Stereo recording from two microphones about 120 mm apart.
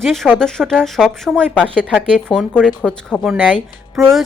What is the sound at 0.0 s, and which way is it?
Speech, centre (ahead or behind).